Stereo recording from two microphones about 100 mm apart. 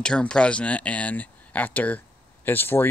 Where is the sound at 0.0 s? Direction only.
10° left (ahead or behind).